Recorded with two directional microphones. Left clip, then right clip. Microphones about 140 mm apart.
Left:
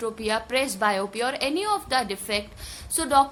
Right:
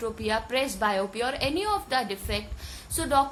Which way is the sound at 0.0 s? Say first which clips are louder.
Left 2 dB; 35° left (ahead or behind).